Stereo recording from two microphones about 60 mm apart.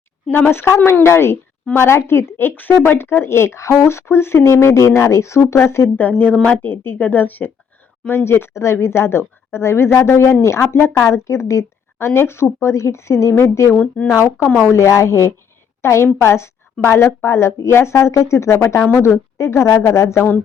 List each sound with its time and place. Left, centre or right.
0.3 s speech: left
2.6 s speech: left
6.0 s speech: left
6.3 s a woman's voice: centre
6.6 s speech: left
8.1 s speech: left
11.1 s speech: left
13.7 s speech: left
14.7 s a woman's voice: left